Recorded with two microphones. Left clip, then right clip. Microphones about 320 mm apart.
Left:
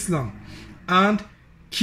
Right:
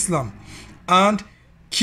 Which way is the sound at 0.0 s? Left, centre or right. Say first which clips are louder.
Right 4 dB; centre.